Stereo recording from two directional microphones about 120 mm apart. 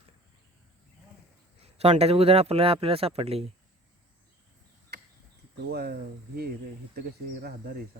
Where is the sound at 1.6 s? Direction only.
60° right (ahead or behind).